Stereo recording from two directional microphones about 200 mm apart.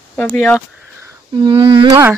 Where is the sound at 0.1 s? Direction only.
5° left (ahead or behind).